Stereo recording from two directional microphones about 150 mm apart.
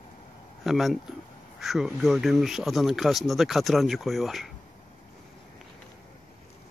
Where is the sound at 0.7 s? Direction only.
Centre (ahead or behind).